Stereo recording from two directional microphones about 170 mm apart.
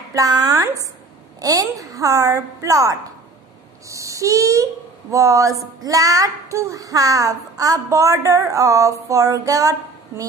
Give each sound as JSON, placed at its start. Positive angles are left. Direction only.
{"t": 0.1, "sound": "child singing", "side_deg": -20}